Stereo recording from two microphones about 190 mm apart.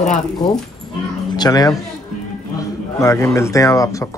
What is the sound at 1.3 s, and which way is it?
Speech, 20° left (ahead or behind).